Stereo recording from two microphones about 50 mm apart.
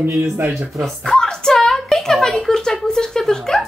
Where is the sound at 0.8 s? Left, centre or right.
Centre.